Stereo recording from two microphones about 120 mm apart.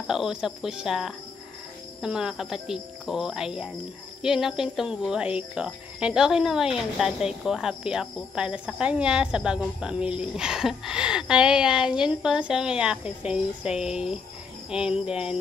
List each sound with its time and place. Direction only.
0.0 s cricket: 5° right (ahead or behind)